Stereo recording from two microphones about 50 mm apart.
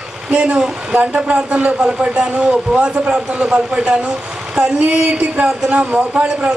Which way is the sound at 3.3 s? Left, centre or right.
Right.